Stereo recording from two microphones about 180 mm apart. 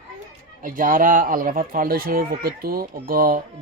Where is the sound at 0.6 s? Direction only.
50° right (ahead or behind).